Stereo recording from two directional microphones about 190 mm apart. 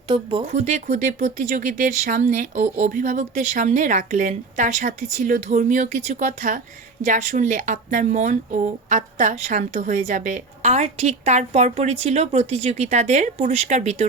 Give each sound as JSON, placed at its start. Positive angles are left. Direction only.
{"t": 0.1, "sound": "speech", "side_deg": -25}
{"t": 0.4, "sound": "speech", "side_deg": -40}